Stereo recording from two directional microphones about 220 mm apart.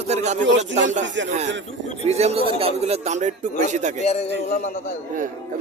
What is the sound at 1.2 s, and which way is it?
Speech, 30° right (ahead or behind).